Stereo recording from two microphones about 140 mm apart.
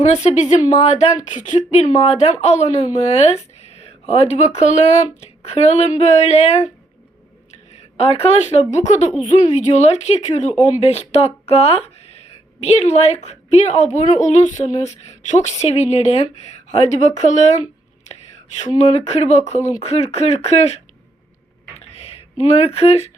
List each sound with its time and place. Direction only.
0.0 s speech: 55° left (ahead or behind)
18.6 s speech: 50° left (ahead or behind)
21.9 s speech: 50° left (ahead or behind)